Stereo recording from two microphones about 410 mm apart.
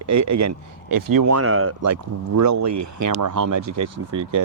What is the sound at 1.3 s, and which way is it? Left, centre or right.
A man's voice, right.